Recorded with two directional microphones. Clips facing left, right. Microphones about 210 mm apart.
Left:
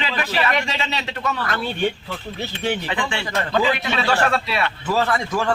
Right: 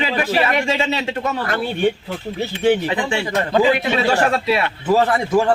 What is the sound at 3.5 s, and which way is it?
Speech, 35° right (ahead or behind).